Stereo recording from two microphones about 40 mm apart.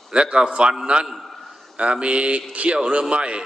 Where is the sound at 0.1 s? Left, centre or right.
Right.